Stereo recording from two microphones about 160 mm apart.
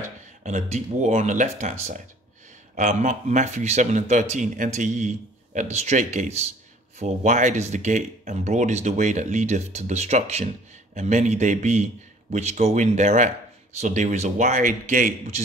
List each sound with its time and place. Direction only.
0.4 s speech: 50° right (ahead or behind)